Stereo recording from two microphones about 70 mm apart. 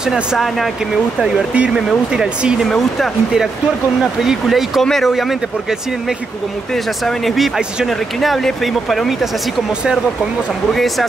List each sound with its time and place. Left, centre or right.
0.1 s speech: centre
1.7 s speech: centre
4.2 s speech: centre
6.7 s speech: centre
10.7 s speech: centre